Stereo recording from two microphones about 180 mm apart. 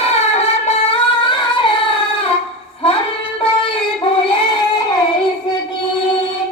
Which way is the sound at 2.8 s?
30° left (ahead or behind).